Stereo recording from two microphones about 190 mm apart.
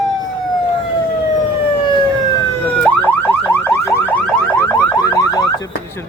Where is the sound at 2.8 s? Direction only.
10° left (ahead or behind).